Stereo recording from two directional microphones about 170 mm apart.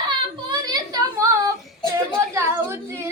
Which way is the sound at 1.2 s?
20° right (ahead or behind).